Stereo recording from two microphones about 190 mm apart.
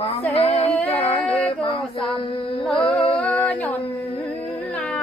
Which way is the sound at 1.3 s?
30° left (ahead or behind).